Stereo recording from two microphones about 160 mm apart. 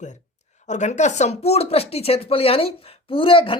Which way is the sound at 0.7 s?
45° left (ahead or behind).